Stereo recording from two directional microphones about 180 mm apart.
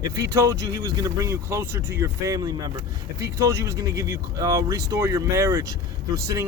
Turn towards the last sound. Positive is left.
turn(degrees=-15)  # may be behind; listen again after turning